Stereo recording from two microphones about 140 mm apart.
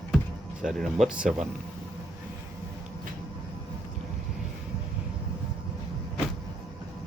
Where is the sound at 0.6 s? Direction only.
Centre (ahead or behind).